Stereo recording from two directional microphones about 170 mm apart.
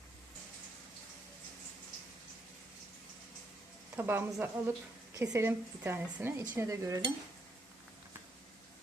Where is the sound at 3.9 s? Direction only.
10° right (ahead or behind).